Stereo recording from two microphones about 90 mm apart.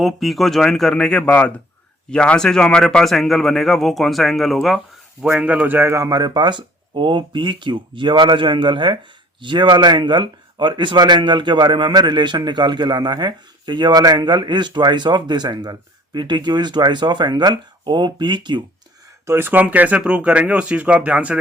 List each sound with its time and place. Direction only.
0.0 s speech: centre (ahead or behind)
5.4 s speech: 15° right (ahead or behind)
6.0 s speech: 45° right (ahead or behind)
19.2 s speech: 30° right (ahead or behind)